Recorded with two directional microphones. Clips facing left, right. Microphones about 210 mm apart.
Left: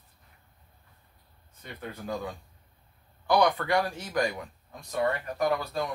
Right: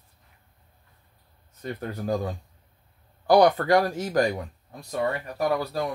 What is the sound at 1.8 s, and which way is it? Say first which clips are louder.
Speech: right 6 dB; 45° right (ahead or behind).